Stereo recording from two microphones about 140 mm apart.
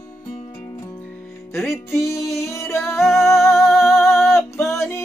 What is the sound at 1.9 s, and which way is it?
Music, 20° left (ahead or behind).